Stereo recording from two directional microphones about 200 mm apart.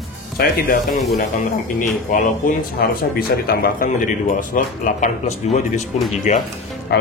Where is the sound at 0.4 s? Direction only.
50° left (ahead or behind).